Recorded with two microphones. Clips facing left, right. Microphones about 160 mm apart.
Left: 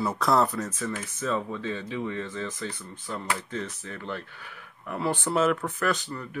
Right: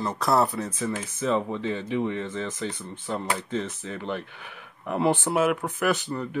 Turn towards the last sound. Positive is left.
turn(degrees=-25)  # may be behind; listen again after turning